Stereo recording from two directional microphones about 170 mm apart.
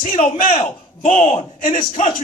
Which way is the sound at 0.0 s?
50° left (ahead or behind).